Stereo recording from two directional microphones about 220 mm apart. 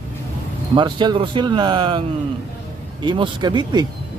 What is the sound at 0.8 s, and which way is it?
Speech, 20° right (ahead or behind).